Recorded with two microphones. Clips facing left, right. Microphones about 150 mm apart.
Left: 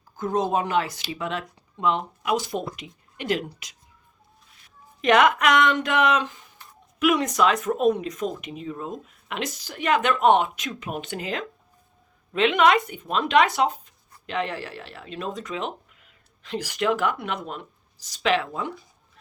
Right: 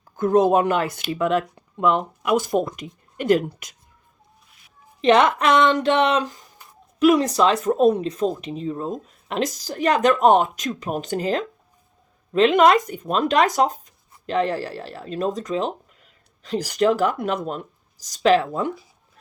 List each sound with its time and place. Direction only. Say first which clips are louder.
0.2 s speech: right 7 dB; 50° right (ahead or behind)
4.9 s speech: right 2 dB; 30° right (ahead or behind)